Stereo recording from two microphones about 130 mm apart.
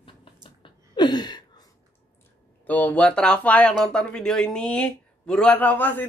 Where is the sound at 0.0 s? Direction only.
40° left (ahead or behind).